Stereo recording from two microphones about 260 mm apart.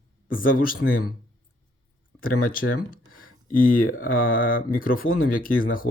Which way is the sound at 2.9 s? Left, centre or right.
Left.